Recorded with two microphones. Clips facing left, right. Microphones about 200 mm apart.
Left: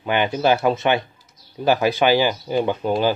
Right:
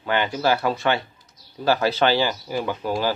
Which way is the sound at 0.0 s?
20° left (ahead or behind).